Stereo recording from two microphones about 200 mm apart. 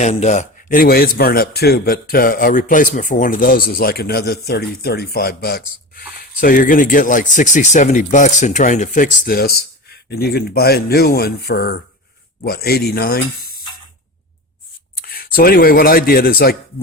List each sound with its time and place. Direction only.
0.0 s speech: 35° left (ahead or behind)
15.0 s speech: 45° left (ahead or behind)